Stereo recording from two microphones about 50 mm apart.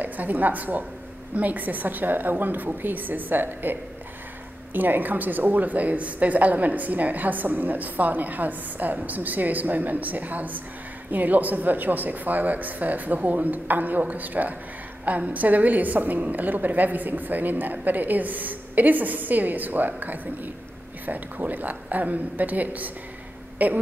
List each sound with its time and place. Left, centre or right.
0.0 s a woman's voice: right
4.7 s a woman's voice: right